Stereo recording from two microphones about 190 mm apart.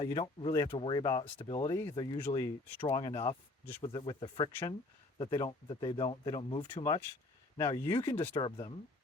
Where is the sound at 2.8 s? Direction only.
30° left (ahead or behind).